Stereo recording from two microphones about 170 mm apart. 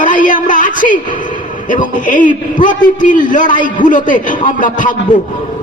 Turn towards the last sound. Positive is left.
turn(degrees=50)  # may be behind; listen again after turning